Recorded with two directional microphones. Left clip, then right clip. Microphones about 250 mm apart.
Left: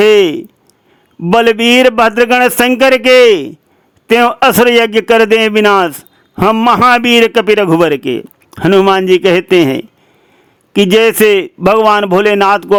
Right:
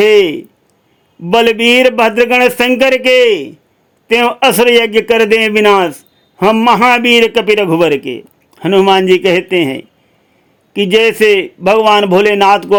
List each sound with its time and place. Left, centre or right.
0.0 s a man's voice: centre